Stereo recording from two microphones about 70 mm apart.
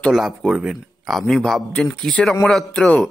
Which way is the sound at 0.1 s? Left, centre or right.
Centre.